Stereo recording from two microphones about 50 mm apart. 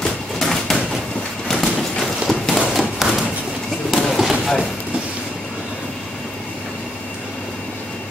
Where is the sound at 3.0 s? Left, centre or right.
Centre.